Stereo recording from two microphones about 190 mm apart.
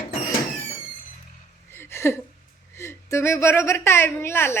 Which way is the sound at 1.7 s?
10° left (ahead or behind).